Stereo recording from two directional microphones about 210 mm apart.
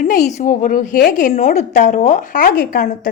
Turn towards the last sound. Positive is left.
turn(degrees=45)  # may be behind; listen again after turning